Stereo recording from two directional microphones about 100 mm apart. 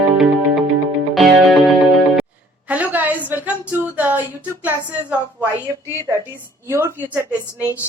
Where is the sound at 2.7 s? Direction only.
15° right (ahead or behind).